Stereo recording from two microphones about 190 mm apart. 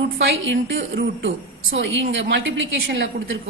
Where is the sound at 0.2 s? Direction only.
75° right (ahead or behind).